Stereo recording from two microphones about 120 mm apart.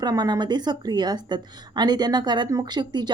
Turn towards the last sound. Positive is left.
turn(degrees=-40)  # may be behind; listen again after turning